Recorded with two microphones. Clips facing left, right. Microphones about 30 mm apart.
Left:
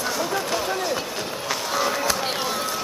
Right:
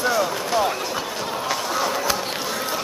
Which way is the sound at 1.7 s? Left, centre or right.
Centre.